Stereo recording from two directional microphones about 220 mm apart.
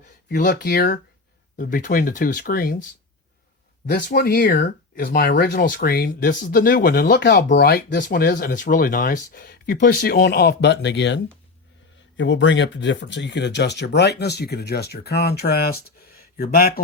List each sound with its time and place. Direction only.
0.3 s speech: 45° left (ahead or behind)
3.8 s speech: 45° left (ahead or behind)